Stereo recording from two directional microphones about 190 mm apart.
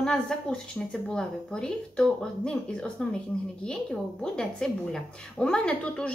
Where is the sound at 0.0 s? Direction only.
5° left (ahead or behind).